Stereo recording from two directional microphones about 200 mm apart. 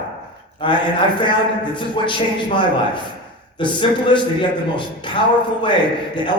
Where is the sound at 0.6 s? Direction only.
25° left (ahead or behind).